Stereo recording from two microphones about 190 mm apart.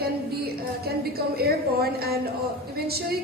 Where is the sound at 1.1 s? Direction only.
55° right (ahead or behind).